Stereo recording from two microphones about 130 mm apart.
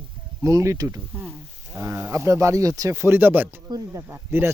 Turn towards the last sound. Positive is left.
turn(degrees=-20)  # may be behind; listen again after turning